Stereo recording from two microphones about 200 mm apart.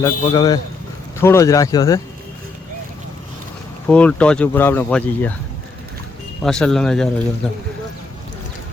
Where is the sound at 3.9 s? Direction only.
5° left (ahead or behind).